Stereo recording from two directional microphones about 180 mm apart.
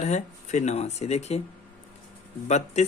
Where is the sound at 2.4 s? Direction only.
40° left (ahead or behind).